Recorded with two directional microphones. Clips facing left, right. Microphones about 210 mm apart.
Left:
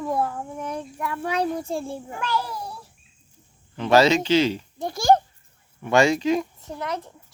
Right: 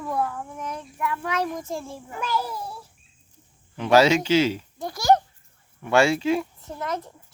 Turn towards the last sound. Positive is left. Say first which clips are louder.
# left 1 dB
turn(degrees=-5)  # may be behind; listen again after turning